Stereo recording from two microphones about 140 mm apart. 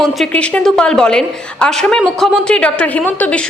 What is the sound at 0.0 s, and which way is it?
A woman's voice, 5° left (ahead or behind).